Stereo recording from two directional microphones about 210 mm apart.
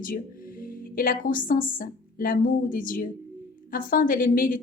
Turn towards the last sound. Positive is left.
turn(degrees=40)  # may be behind; listen again after turning